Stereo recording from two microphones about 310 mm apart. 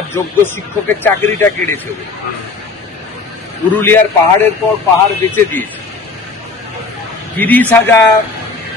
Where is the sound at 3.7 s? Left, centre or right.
Centre.